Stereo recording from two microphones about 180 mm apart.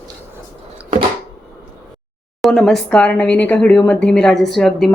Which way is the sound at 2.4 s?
Centre (ahead or behind).